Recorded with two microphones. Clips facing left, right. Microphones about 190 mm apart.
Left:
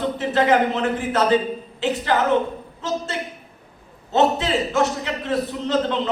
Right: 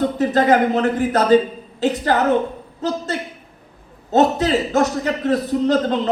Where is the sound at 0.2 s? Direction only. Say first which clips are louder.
Right 2 dB; 40° right (ahead or behind).